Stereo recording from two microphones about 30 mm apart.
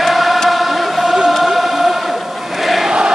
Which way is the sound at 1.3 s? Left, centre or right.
Centre.